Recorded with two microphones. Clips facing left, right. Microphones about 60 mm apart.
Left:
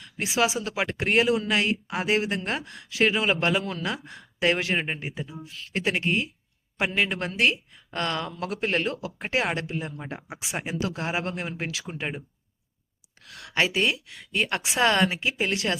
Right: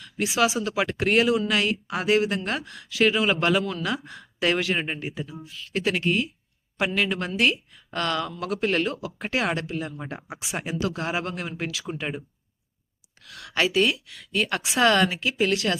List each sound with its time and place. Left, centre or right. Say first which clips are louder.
0.2 s speech: right 2 dB; left
8.9 s speech: even; left
10.2 s speech: even; centre
10.6 s speech: right 2 dB; left
13.3 s speech: right 2 dB; left